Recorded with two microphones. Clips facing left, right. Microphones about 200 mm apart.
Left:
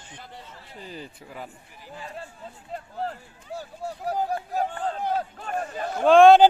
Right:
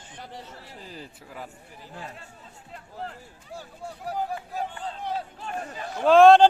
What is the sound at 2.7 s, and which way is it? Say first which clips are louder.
Speech: left 6 dB; 40° left (ahead or behind).